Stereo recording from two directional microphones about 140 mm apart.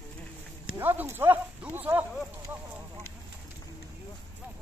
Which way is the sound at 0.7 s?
15° right (ahead or behind).